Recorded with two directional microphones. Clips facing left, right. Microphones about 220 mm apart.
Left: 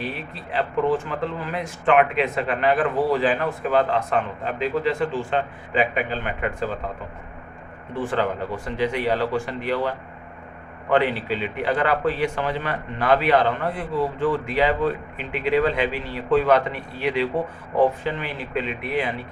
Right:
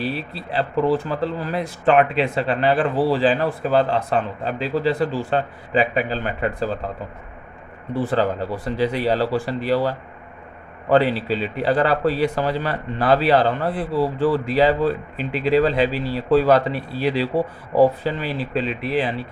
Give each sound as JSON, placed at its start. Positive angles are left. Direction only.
{"t": 0.0, "sound": "speech", "side_deg": -35}
{"t": 7.9, "sound": "speech", "side_deg": -35}